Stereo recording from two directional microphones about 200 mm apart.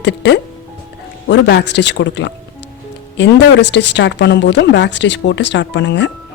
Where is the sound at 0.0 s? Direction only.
60° left (ahead or behind).